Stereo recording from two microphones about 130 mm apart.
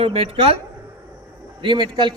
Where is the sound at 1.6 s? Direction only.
35° right (ahead or behind).